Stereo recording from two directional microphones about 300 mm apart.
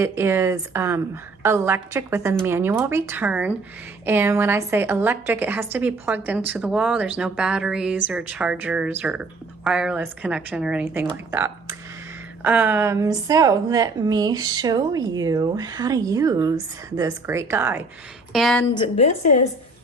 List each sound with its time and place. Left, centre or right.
0.0 s a woman's voice: centre
18.7 s a woman's voice: centre